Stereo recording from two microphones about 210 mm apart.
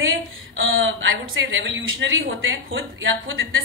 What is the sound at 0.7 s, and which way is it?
Speech, 70° right (ahead or behind).